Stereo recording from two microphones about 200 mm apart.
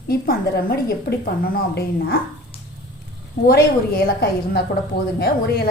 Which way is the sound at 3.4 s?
50° left (ahead or behind).